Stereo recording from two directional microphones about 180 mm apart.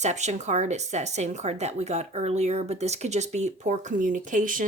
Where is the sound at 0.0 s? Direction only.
40° right (ahead or behind).